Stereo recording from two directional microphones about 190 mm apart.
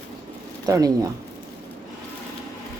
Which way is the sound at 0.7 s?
20° right (ahead or behind).